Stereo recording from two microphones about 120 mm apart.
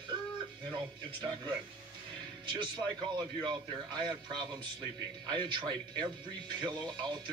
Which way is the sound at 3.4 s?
40° right (ahead or behind).